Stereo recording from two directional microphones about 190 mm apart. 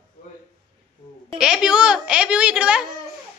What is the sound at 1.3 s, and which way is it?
A woman's voice, 5° right (ahead or behind).